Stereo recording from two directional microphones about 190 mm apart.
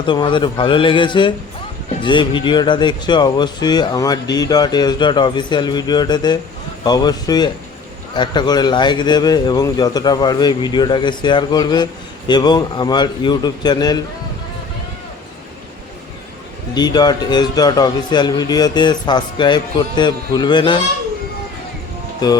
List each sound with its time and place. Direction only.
0.0 s speech: 25° left (ahead or behind)
16.7 s speech: 20° left (ahead or behind)